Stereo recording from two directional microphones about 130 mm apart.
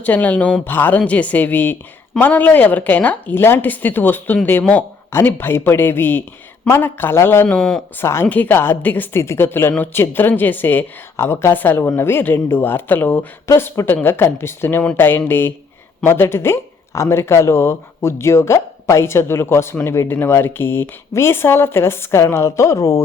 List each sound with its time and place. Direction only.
0.0 s a woman's voice: 10° left (ahead or behind)
7.4 s speech: 5° left (ahead or behind)
7.9 s a woman's voice: 20° left (ahead or behind)